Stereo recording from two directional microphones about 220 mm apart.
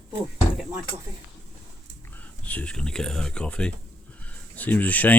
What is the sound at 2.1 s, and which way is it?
Speech, 5° left (ahead or behind).